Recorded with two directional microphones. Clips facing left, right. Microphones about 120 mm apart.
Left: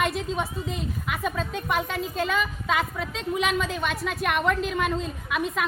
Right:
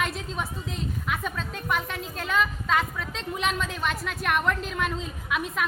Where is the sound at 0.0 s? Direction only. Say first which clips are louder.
Left 4 dB; centre (ahead or behind).